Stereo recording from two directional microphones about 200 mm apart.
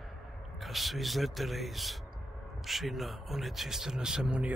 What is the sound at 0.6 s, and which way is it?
Speech, centre (ahead or behind).